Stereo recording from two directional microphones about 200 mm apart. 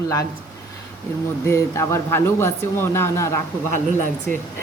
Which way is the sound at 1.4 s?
15° left (ahead or behind).